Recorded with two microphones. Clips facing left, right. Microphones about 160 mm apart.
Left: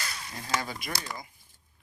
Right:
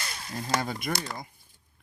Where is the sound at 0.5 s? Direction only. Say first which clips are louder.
Right 2 dB; 50° right (ahead or behind).